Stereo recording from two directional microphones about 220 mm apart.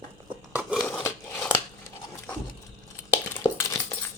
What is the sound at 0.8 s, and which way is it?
Scissors, 10° left (ahead or behind).